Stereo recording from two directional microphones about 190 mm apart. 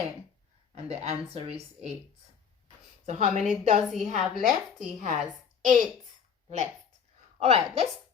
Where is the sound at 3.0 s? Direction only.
35° right (ahead or behind).